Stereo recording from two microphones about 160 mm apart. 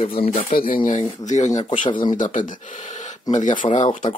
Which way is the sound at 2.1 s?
50° left (ahead or behind).